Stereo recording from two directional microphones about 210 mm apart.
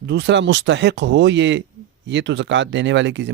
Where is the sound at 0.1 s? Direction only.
55° right (ahead or behind).